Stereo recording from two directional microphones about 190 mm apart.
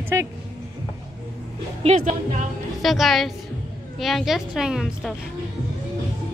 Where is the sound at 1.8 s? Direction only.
35° right (ahead or behind).